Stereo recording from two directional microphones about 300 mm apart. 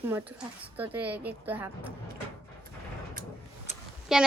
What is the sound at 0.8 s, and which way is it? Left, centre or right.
Speech, centre.